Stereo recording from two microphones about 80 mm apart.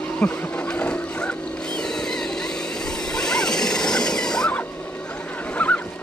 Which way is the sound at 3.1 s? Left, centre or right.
Centre.